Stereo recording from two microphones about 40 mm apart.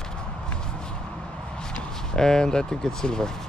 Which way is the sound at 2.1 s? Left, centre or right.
Centre.